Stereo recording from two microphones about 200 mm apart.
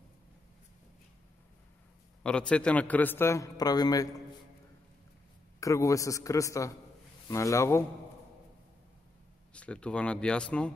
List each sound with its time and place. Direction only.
2.2 s a man's voice: 5° left (ahead or behind)
5.6 s a man's voice: 15° left (ahead or behind)
9.5 s speech: 5° left (ahead or behind)